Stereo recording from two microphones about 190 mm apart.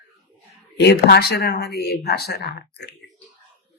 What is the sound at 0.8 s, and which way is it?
Speech, 60° left (ahead or behind).